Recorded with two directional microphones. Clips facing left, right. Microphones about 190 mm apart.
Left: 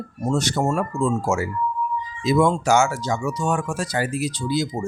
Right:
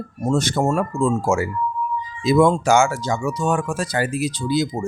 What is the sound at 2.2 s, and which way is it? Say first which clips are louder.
Speech: right 3 dB; 55° right (ahead or behind).